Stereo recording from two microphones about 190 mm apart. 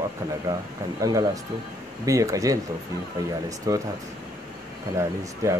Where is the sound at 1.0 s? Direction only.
20° right (ahead or behind).